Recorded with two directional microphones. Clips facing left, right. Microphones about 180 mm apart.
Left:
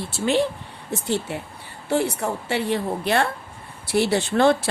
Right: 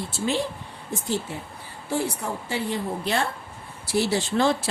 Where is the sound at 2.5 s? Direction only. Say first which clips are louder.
Left 4 dB; 70° left (ahead or behind).